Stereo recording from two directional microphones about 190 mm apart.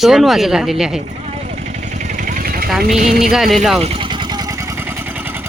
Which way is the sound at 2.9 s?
40° right (ahead or behind).